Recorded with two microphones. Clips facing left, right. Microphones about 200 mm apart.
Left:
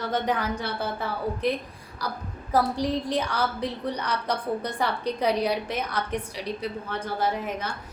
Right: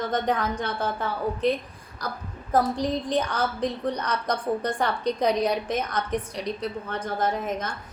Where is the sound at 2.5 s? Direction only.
10° left (ahead or behind).